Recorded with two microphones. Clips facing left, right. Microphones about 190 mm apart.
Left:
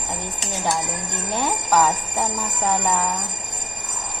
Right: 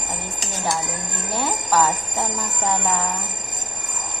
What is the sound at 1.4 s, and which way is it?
Speech, 15° left (ahead or behind).